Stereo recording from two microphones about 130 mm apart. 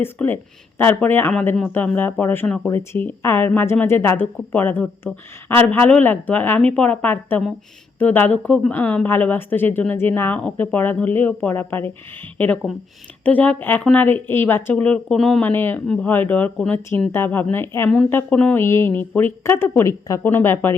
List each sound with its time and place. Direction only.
0.0 s speech: 15° left (ahead or behind)
13.2 s speech: 10° left (ahead or behind)
18.6 s speech: 20° left (ahead or behind)